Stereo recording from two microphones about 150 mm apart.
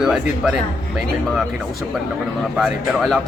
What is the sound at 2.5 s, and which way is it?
Speech, centre (ahead or behind).